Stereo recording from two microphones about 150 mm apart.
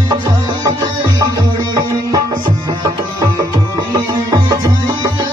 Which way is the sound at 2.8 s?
25° right (ahead or behind).